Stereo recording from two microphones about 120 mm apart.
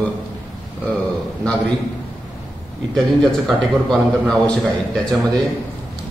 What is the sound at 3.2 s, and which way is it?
A man's voice, 5° left (ahead or behind).